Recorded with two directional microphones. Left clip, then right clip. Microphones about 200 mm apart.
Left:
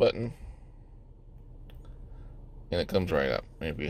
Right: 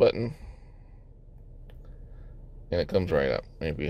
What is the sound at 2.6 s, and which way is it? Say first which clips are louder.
Speech: right 2 dB; 10° right (ahead or behind).